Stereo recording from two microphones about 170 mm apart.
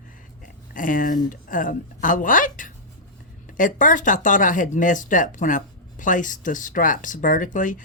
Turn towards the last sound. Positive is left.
turn(degrees=50)  # may be behind; listen again after turning